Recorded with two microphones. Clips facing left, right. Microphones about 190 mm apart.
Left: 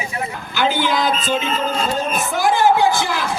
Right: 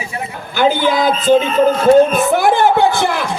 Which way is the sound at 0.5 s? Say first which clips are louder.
Right 5 dB; 50° right (ahead or behind).